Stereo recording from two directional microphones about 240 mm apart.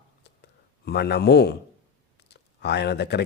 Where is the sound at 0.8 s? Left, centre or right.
Left.